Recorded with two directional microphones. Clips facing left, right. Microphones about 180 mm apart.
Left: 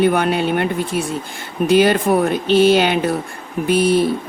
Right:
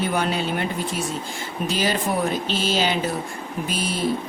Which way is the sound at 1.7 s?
60° left (ahead or behind).